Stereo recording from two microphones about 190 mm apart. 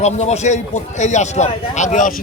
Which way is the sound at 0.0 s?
35° left (ahead or behind).